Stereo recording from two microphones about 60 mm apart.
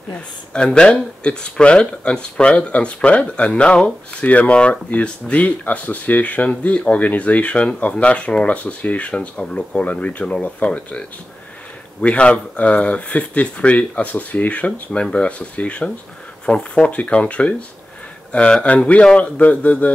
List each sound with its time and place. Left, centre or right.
0.1 s speech: centre